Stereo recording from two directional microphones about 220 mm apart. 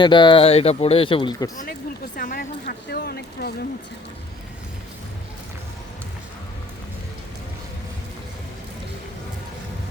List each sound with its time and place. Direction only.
0.0 s speech: 20° left (ahead or behind)
2.1 s a woman's voice: 40° left (ahead or behind)